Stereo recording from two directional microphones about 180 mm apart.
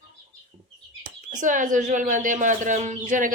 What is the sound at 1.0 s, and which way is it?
Speech, 45° right (ahead or behind).